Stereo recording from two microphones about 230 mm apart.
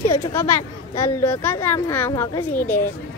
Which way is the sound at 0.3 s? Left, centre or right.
Centre.